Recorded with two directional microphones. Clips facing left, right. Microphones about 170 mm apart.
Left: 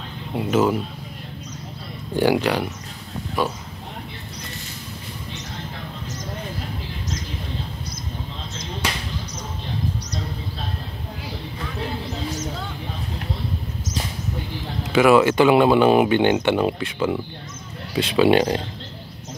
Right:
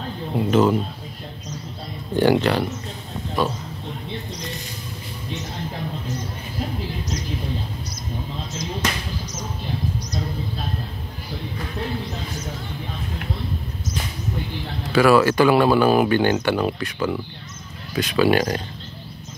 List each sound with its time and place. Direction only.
0.4 s speech: 5° left (ahead or behind)
2.1 s speech: 10° left (ahead or behind)
14.8 s speech: 20° left (ahead or behind)